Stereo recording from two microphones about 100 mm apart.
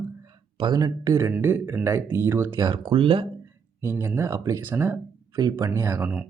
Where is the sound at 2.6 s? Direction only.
50° right (ahead or behind).